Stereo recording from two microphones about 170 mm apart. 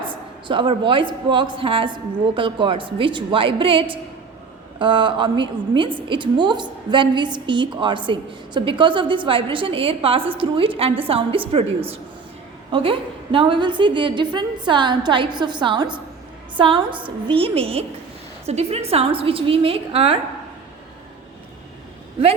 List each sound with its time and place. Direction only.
0.4 s a woman's voice: 30° right (ahead or behind)
12.7 s a woman's voice: 30° right (ahead or behind)